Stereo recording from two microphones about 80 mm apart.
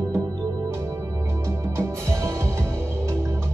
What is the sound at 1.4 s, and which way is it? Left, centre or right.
Music, right.